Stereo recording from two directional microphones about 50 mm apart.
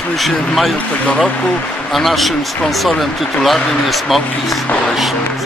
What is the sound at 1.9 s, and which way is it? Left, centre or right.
Speech, centre.